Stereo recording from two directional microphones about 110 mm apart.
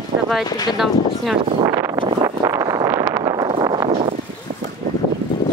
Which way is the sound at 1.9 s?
60° right (ahead or behind).